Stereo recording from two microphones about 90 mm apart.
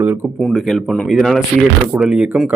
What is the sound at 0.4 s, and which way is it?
Speech, centre (ahead or behind).